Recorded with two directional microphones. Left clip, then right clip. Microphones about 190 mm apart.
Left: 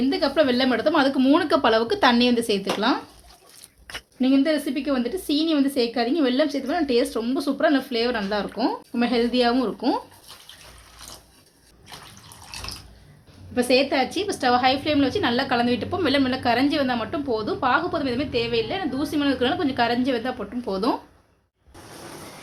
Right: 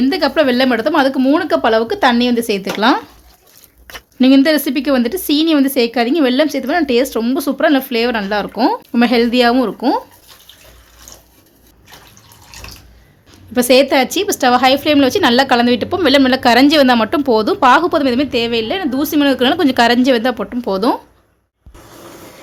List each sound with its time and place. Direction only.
0.0 s speech: 30° right (ahead or behind)
4.2 s speech: 40° right (ahead or behind)
13.5 s a woman's voice: 55° right (ahead or behind); by 21.0 s 35° right (ahead or behind)